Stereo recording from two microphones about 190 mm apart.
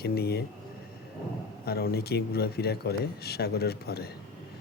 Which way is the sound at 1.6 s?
55° left (ahead or behind).